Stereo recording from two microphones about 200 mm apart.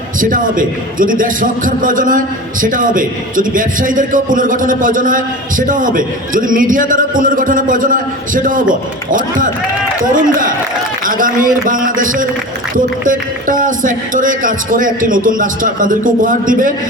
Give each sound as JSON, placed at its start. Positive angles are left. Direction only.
{"t": 0.2, "sound": "a man's voice", "side_deg": -40}